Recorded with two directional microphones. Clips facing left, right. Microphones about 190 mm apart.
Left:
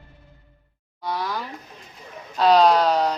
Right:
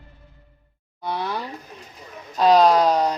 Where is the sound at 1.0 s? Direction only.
25° right (ahead or behind).